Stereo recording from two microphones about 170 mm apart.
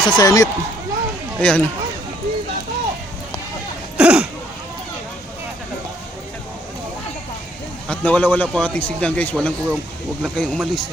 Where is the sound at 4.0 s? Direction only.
5° right (ahead or behind).